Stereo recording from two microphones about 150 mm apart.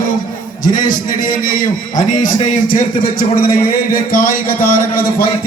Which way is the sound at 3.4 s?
70° left (ahead or behind).